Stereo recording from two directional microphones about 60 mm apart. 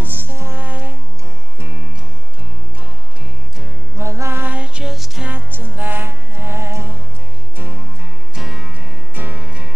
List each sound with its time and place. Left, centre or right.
0.0 s music: right
3.9 s music: right
4.4 s music: right
4.8 s music: centre
5.3 s music: right
8.4 s music: centre
9.1 s music: right
9.4 s music: centre